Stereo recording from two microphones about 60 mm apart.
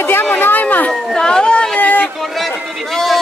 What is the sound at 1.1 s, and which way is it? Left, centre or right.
Speech, centre.